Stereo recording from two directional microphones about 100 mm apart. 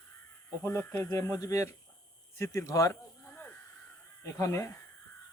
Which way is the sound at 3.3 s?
20° left (ahead or behind).